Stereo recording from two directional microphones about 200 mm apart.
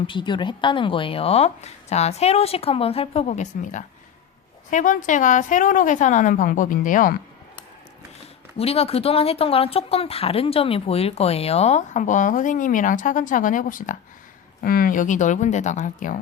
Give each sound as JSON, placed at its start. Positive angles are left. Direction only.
{"t": 0.1, "sound": "a woman's voice", "side_deg": 25}
{"t": 8.5, "sound": "speech", "side_deg": 30}